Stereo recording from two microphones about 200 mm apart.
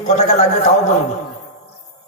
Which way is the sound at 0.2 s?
35° left (ahead or behind).